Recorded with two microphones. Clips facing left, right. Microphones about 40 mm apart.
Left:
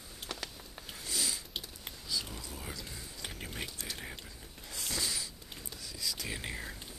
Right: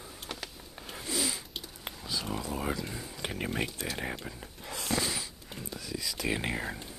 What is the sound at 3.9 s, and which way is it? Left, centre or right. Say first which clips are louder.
Whispering: right 8 dB; right.